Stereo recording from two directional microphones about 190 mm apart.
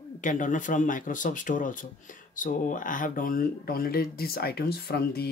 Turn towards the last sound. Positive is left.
turn(degrees=55)  # may be behind; listen again after turning